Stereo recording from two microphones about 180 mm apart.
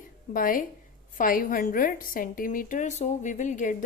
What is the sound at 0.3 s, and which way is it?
A woman's voice, 50° left (ahead or behind).